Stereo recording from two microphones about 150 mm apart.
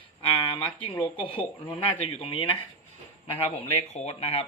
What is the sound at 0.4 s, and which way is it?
Speech, 35° left (ahead or behind).